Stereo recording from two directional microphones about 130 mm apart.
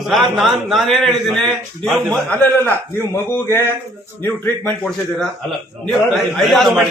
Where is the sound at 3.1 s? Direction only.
20° left (ahead or behind).